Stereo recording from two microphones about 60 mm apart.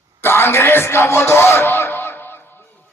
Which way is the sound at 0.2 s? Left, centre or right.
Left.